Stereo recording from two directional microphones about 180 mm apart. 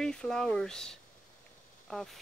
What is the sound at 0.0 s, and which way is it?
Speech, 5° left (ahead or behind).